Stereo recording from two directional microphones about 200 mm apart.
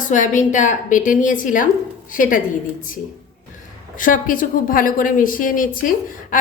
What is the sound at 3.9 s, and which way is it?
Speech, 40° left (ahead or behind).